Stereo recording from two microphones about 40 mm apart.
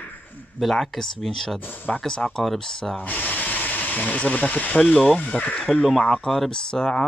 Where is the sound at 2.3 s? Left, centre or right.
Centre.